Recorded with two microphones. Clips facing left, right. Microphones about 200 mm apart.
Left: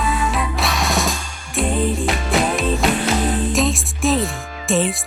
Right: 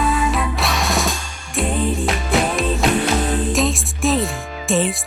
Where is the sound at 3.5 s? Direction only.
Centre (ahead or behind).